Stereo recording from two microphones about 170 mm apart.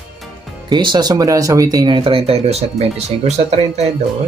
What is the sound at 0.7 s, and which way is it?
Speech, 25° right (ahead or behind).